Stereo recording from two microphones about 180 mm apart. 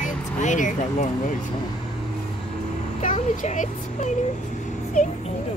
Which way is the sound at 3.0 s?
40° left (ahead or behind).